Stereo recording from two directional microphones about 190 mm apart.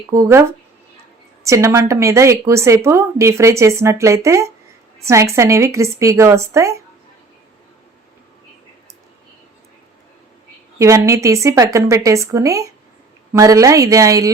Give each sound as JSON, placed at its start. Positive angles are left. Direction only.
{"t": 0.1, "sound": "a woman's voice", "side_deg": -15}
{"t": 10.8, "sound": "a woman's voice", "side_deg": -15}